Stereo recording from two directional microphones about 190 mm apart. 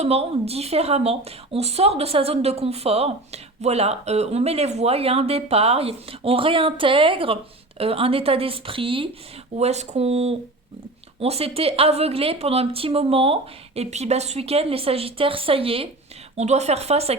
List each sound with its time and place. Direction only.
0.0 s a woman's voice: 35° right (ahead or behind)